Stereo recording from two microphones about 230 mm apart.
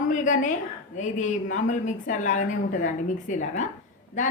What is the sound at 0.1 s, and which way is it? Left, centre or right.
A woman's voice, left.